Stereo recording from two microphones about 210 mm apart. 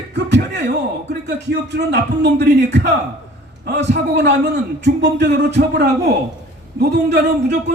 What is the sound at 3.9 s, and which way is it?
A man's voice, 55° right (ahead or behind).